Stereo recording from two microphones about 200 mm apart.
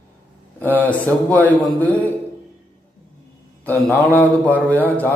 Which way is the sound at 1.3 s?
5° left (ahead or behind).